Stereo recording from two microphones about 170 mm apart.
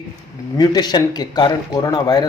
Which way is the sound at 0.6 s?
25° left (ahead or behind).